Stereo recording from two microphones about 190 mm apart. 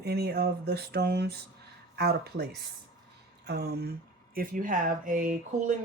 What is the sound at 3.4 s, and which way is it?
Speech, 55° right (ahead or behind).